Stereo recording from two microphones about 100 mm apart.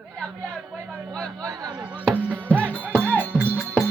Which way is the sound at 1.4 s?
35° right (ahead or behind).